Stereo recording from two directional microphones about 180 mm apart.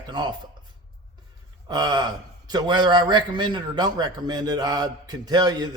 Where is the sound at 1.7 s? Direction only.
20° right (ahead or behind).